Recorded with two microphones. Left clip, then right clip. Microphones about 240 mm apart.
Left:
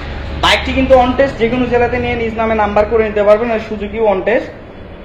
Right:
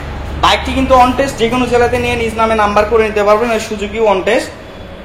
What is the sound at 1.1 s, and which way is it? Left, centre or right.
Speech, centre.